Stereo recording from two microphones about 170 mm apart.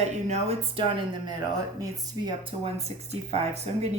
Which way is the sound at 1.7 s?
20° right (ahead or behind).